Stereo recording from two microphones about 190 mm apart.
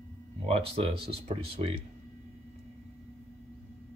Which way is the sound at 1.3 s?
35° right (ahead or behind).